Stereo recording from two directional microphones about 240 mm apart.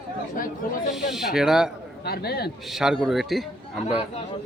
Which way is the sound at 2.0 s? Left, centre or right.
Left.